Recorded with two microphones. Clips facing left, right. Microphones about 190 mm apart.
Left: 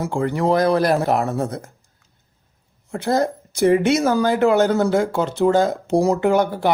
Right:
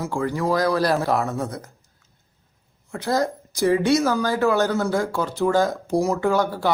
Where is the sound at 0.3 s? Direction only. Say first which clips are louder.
Left 4 dB; 20° left (ahead or behind).